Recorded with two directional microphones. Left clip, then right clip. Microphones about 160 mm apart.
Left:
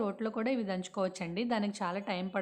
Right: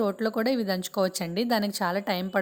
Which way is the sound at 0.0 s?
35° right (ahead or behind).